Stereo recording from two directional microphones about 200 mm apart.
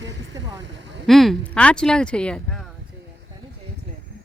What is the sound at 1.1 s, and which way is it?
Speech, centre (ahead or behind).